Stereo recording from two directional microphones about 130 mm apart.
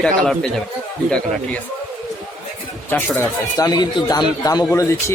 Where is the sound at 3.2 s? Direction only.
30° left (ahead or behind).